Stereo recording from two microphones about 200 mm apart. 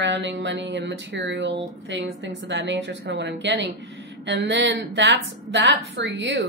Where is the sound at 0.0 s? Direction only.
65° right (ahead or behind).